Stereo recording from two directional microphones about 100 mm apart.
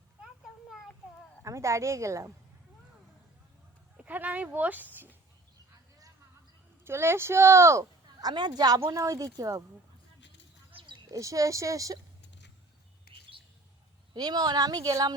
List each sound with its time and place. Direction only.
1.5 s speech: 30° right (ahead or behind)
3.9 s speech: 15° right (ahead or behind)
6.8 s a woman's voice: 25° right (ahead or behind)
8.2 s a woman's voice: 45° right (ahead or behind)
11.1 s speech: 35° right (ahead or behind)
14.1 s speech: 45° right (ahead or behind)